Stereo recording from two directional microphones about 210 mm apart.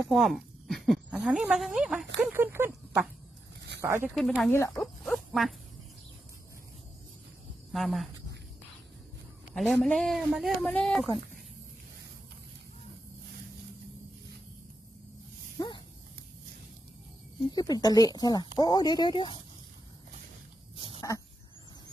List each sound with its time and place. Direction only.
0.1 s a man's voice: centre (ahead or behind)
4.1 s a man's voice: centre (ahead or behind)
4.8 s frog: centre (ahead or behind)
7.7 s a man's voice: centre (ahead or behind)
9.6 s a man's voice: 5° left (ahead or behind)
15.5 s a sound: 20° left (ahead or behind)
17.5 s a woman's voice: 20° left (ahead or behind)
20.7 s a sound: 25° right (ahead or behind)